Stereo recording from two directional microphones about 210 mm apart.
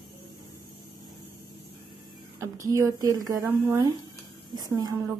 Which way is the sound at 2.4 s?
15° right (ahead or behind).